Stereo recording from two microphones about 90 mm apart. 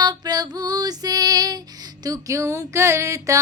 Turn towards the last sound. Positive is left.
turn(degrees=-35)  # may be behind; listen again after turning